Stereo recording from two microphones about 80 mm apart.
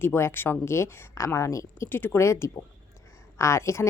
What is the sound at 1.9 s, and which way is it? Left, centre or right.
A woman's voice, left.